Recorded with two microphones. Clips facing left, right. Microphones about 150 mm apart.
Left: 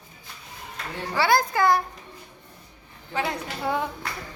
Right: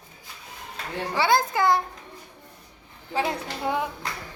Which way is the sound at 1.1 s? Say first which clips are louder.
Left 1 dB; 20° right (ahead or behind).